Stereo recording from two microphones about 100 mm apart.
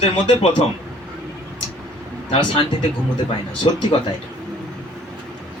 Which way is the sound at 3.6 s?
65° left (ahead or behind).